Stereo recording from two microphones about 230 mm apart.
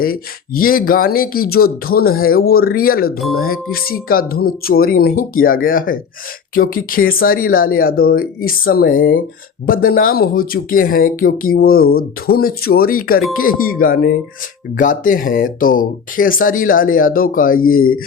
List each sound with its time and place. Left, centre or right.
0.0 s speech: left